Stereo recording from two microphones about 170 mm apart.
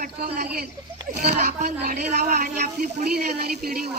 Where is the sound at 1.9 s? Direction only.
45° right (ahead or behind).